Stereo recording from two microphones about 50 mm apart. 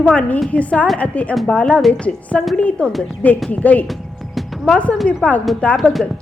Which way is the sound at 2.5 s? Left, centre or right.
Left.